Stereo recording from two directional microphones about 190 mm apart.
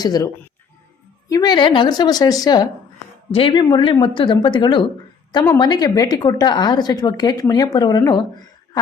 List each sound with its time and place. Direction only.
0.0 s speech: 20° left (ahead or behind)
1.3 s speech: 20° left (ahead or behind)